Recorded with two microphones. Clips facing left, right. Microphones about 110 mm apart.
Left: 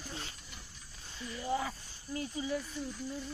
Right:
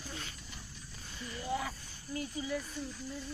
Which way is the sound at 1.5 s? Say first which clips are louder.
Left 2 dB; 30° left (ahead or behind).